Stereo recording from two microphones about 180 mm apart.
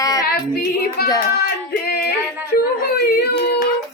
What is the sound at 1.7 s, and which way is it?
Singing, 60° left (ahead or behind).